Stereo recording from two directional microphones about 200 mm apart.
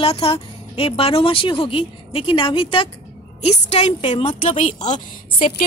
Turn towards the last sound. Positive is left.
turn(degrees=40)  # may be behind; listen again after turning